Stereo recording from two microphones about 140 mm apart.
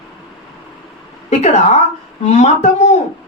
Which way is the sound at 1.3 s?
55° left (ahead or behind).